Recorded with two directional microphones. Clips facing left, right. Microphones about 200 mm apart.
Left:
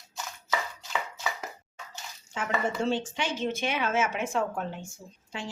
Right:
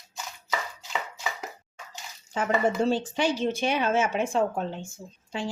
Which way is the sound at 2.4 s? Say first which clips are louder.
Right 5 dB; 35° right (ahead or behind).